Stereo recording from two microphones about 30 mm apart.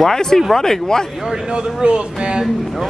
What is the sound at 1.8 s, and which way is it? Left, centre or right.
Speech, right.